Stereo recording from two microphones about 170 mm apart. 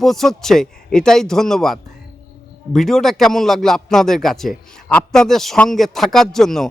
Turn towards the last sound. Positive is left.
turn(degrees=0)  # may be behind; listen again after turning